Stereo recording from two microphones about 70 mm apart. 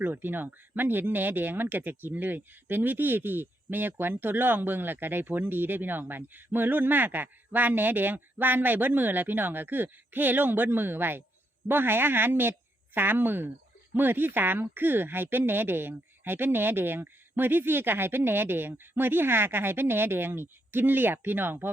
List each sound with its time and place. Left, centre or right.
0.0 s speech: right